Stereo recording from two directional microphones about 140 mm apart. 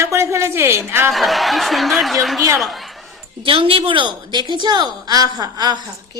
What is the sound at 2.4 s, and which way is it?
Speech, 20° right (ahead or behind).